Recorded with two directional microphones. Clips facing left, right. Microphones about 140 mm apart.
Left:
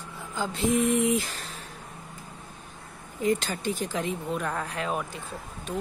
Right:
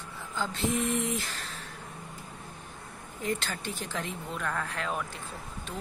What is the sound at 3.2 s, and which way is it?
Speech, 15° left (ahead or behind).